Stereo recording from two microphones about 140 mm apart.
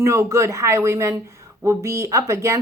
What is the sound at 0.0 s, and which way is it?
A woman's voice, 20° right (ahead or behind).